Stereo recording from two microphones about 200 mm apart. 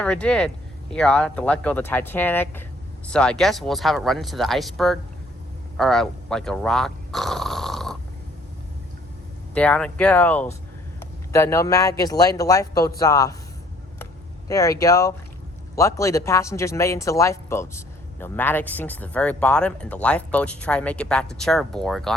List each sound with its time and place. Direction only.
0.0 s speech: 5° left (ahead or behind)
9.6 s speech: 5° left (ahead or behind)
14.0 s vehicle: 15° left (ahead or behind)
15.7 s speech: 15° left (ahead or behind)